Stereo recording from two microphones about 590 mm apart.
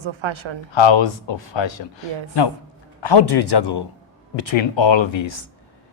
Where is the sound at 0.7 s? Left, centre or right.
Left.